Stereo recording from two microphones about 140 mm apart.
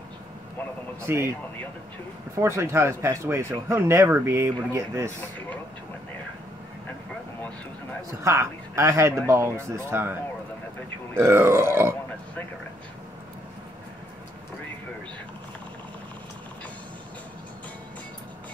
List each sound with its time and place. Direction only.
1.1 s speech: 15° right (ahead or behind)
2.3 s speech: 20° right (ahead or behind)
8.2 s speech: 20° right (ahead or behind)
11.1 s speech: 20° right (ahead or behind)